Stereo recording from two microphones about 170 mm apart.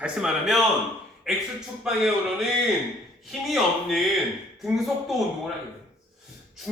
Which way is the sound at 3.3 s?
Centre (ahead or behind).